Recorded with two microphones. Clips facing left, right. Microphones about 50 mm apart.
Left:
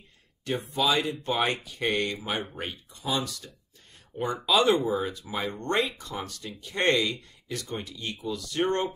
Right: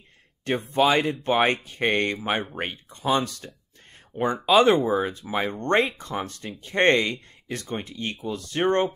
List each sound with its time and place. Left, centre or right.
0.5 s speech: right
4.1 s speech: right